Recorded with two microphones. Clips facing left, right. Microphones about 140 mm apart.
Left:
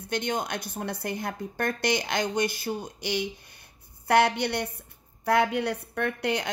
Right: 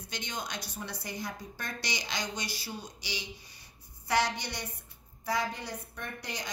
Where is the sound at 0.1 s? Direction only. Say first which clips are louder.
Left 10 dB; 55° left (ahead or behind).